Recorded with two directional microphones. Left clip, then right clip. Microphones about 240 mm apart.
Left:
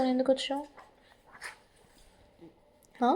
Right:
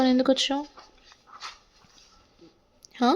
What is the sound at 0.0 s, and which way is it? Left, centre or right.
Speech, right.